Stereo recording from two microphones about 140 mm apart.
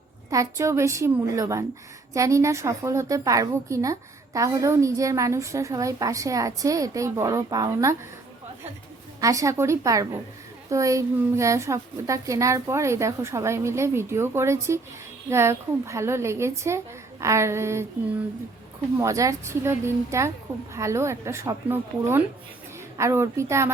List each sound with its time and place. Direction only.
0.3 s a woman's voice: 20° right (ahead or behind)
9.2 s a woman's voice: 25° right (ahead or behind)
18.9 s a woman's voice: 20° right (ahead or behind)